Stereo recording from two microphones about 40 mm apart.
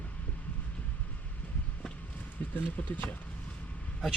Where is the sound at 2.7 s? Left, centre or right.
Left.